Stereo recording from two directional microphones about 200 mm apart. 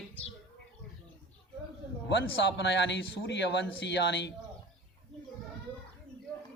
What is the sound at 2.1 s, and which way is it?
A man's voice, 60° left (ahead or behind).